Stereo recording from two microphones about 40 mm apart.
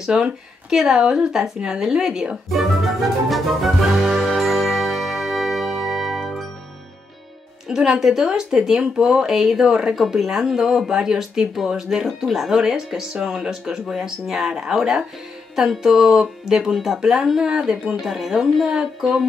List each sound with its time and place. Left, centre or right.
0.0 s a woman's voice: centre
2.5 s music: centre
7.6 s speech: centre
17.9 s speech: centre